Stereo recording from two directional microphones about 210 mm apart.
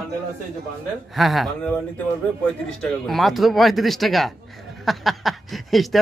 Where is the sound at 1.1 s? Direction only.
Centre (ahead or behind).